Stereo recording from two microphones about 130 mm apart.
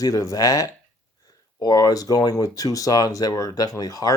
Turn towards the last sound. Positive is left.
turn(degrees=30)  # may be behind; listen again after turning